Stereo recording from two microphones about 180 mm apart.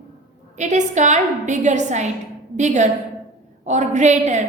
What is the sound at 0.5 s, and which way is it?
A woman's voice, 40° right (ahead or behind).